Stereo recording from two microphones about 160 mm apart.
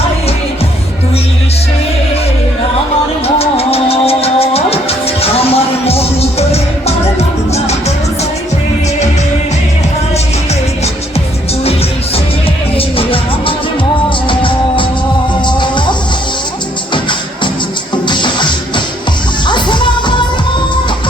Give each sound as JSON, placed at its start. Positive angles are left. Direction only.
{"t": 3.2, "sound": "music", "side_deg": 40}
{"t": 12.7, "sound": "music", "side_deg": 35}
{"t": 14.3, "sound": "music", "side_deg": 30}